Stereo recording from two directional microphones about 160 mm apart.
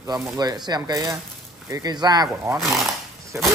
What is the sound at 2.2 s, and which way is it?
Speech, 15° right (ahead or behind).